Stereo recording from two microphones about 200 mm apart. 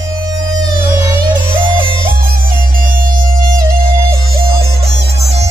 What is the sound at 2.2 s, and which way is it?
Music, 45° right (ahead or behind).